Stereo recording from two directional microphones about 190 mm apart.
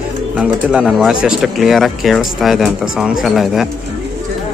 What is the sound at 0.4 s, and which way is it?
Speech, 5° right (ahead or behind).